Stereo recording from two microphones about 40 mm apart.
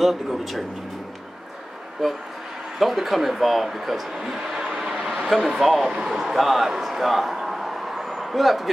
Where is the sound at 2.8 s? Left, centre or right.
Centre.